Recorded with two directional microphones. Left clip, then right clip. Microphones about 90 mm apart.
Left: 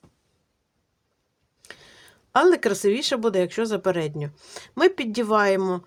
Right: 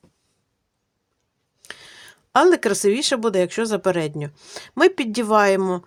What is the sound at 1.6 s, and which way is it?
Speech, 30° right (ahead or behind).